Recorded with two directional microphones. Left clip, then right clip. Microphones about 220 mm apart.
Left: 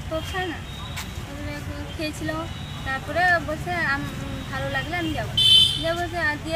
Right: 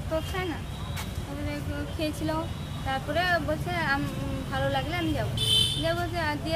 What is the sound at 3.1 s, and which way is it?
Speech, 25° right (ahead or behind).